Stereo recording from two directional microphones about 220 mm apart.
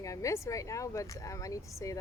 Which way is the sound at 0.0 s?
15° left (ahead or behind).